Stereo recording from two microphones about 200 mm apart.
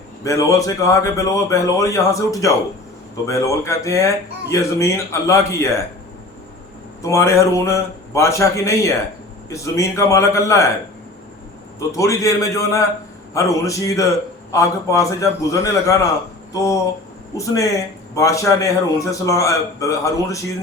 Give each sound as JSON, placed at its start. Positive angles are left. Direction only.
{"t": 0.3, "sound": "a man's voice", "side_deg": 15}
{"t": 7.0, "sound": "a man's voice", "side_deg": 15}
{"t": 11.8, "sound": "a man's voice", "side_deg": 15}
{"t": 16.5, "sound": "a sound", "side_deg": 15}
{"t": 17.3, "sound": "a man's voice", "side_deg": 15}